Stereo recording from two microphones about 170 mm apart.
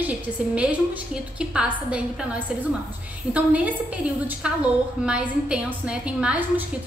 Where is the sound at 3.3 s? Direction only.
10° right (ahead or behind).